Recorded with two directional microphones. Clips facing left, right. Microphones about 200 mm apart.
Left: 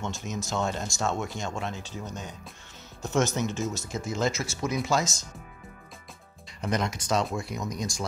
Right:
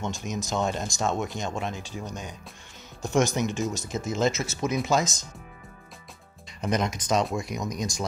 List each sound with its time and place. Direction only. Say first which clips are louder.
0.0 s speech: right 2 dB; 15° right (ahead or behind)
3.0 s speech: right 2 dB; 15° right (ahead or behind)
6.6 s speech: right 2 dB; 20° right (ahead or behind)